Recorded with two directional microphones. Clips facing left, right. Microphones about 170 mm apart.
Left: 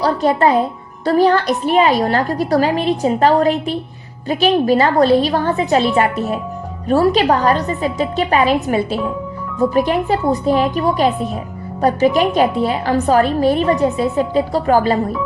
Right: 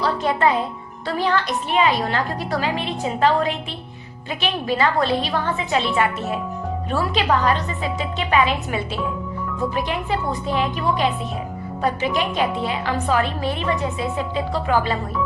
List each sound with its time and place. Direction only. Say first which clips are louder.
0.0 s a woman's voice: left 5 dB; 40° left (ahead or behind)